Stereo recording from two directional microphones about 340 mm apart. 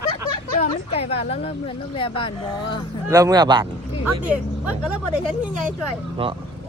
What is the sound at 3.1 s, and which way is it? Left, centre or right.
Speech, centre.